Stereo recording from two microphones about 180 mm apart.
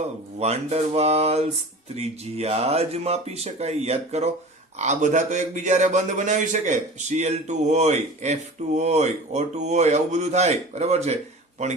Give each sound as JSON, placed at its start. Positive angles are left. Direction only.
{"t": 0.3, "sound": "a man's voice", "side_deg": -35}